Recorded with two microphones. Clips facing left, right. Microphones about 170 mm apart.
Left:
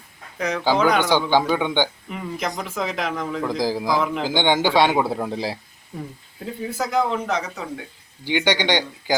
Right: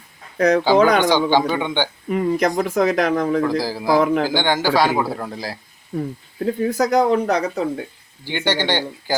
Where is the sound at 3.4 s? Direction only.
15° left (ahead or behind).